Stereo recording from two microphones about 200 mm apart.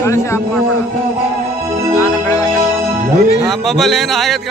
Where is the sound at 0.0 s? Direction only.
15° left (ahead or behind).